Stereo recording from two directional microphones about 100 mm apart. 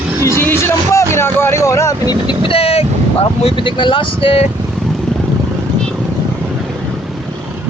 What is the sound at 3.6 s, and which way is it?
Speech, 55° left (ahead or behind).